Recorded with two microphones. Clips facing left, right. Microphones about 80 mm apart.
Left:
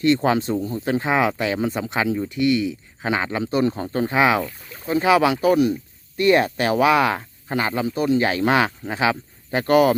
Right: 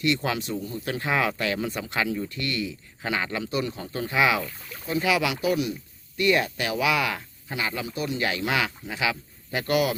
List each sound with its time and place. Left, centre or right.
0.0 s speech: left
4.4 s speech: centre
4.9 s speech: left